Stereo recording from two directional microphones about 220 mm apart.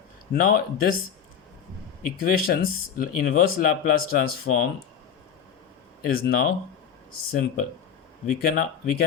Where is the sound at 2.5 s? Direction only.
40° left (ahead or behind).